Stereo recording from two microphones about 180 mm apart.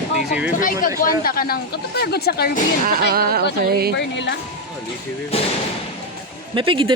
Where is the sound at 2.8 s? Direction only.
55° right (ahead or behind).